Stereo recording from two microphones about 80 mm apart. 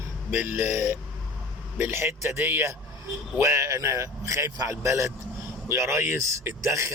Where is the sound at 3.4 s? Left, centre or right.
Right.